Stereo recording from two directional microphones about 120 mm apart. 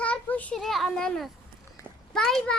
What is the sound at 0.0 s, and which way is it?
Child singing, 10° left (ahead or behind).